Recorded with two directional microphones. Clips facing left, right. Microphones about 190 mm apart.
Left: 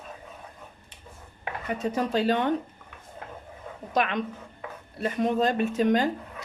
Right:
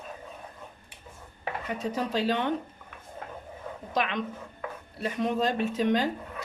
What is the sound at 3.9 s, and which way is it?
A woman's voice, 50° left (ahead or behind).